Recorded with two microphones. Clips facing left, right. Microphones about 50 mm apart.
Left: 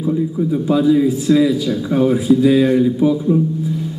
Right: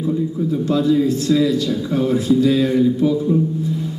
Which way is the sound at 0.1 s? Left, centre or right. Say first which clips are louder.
Left 3 dB; centre.